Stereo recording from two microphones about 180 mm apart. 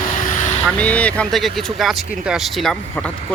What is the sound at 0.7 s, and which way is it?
Speech, 5° left (ahead or behind).